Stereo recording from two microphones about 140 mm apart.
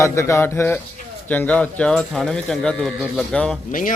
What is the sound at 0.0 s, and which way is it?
Speech, 20° left (ahead or behind).